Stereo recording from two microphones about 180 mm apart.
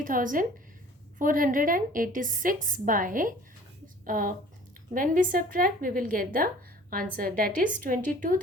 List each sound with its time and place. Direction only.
0.0 s a woman's voice: 50° right (ahead or behind)